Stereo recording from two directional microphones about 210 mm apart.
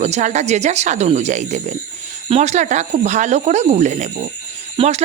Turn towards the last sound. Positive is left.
turn(degrees=-30)  # may be behind; listen again after turning